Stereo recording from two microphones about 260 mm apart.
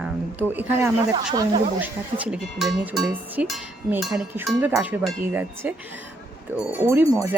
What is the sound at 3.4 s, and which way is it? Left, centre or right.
Speech, centre.